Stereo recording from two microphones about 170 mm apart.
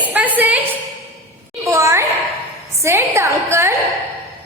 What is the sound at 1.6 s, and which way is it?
A woman's voice, 15° right (ahead or behind).